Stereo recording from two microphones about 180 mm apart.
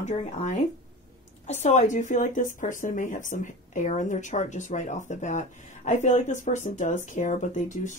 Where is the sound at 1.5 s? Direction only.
40° left (ahead or behind).